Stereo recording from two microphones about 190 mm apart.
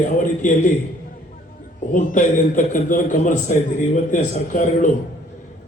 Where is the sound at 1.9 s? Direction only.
45° left (ahead or behind).